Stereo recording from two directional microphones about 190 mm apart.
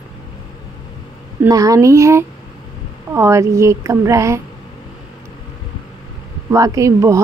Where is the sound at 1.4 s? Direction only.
20° right (ahead or behind).